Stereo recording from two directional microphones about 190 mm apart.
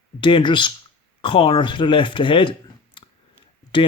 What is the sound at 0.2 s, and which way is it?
Speech, 25° left (ahead or behind).